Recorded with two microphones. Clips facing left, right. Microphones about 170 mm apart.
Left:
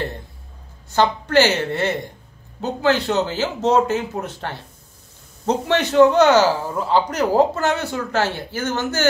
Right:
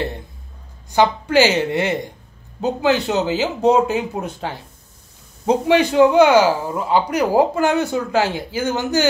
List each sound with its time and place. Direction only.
0.9 s a man's voice: 10° right (ahead or behind)